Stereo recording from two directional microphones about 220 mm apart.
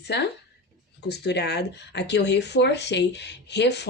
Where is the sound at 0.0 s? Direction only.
50° left (ahead or behind).